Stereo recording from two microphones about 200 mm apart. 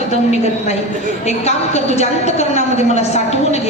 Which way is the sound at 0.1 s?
35° left (ahead or behind).